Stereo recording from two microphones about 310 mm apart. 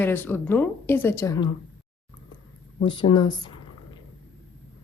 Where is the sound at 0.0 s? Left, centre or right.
Centre.